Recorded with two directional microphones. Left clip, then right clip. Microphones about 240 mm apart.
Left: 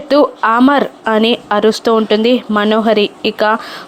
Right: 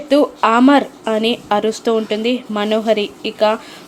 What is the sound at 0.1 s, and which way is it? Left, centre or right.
Speech, centre.